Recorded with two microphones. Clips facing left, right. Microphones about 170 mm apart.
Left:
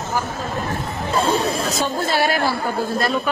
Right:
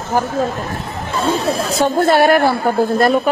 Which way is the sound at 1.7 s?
60° right (ahead or behind).